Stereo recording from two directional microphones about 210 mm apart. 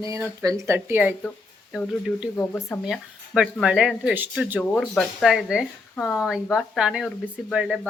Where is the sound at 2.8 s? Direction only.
5° right (ahead or behind).